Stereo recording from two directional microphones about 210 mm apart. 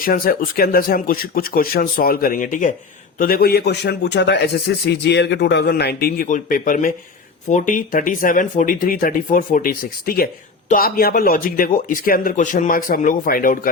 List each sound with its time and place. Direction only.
0.0 s a man's voice: 45° left (ahead or behind)